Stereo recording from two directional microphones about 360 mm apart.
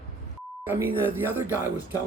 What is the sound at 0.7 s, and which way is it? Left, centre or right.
Speech, centre.